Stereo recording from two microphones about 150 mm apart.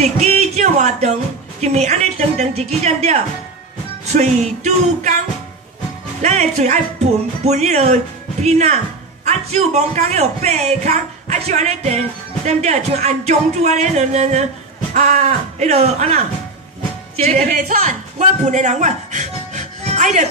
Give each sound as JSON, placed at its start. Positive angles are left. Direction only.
{"t": 0.0, "sound": "a sound", "side_deg": -50}
{"t": 1.6, "sound": "speech", "side_deg": -45}
{"t": 6.2, "sound": "speech", "side_deg": -45}
{"t": 17.5, "sound": "speech", "side_deg": -65}